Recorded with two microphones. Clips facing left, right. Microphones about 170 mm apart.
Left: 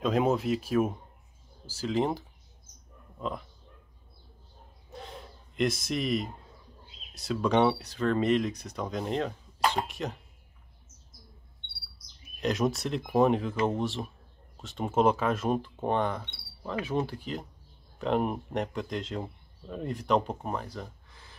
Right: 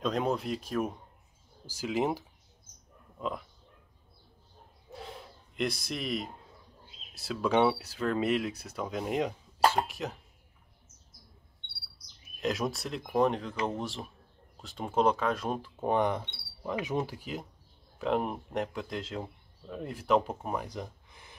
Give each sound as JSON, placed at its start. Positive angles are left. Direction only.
{"t": 0.0, "sound": "a man's voice", "side_deg": 5}
{"t": 1.7, "sound": "speech", "side_deg": -10}
{"t": 5.6, "sound": "a man's voice", "side_deg": 0}
{"t": 12.4, "sound": "a man's voice", "side_deg": 0}
{"t": 16.0, "sound": "a man's voice", "side_deg": -15}
{"t": 20.6, "sound": "gasp", "side_deg": -20}